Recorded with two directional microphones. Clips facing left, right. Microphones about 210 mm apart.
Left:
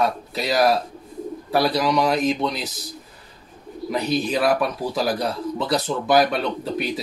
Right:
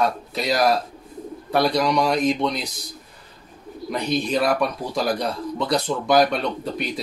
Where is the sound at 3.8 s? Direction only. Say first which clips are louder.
Left 1 dB; 5° left (ahead or behind).